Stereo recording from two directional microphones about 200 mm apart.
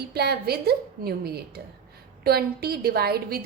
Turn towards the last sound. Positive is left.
turn(degrees=-50)  # may be behind; listen again after turning